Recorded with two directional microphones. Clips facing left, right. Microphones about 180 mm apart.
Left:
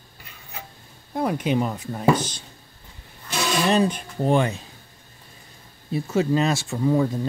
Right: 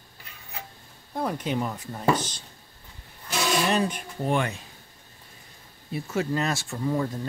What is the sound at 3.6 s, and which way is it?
Speech, 30° left (ahead or behind).